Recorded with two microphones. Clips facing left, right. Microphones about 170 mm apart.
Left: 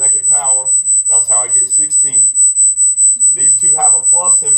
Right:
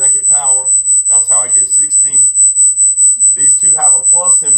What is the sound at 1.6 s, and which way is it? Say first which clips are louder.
Speech: left 3 dB; 25° left (ahead or behind).